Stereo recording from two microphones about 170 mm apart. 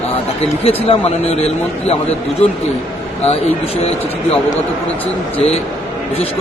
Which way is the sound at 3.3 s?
35° left (ahead or behind).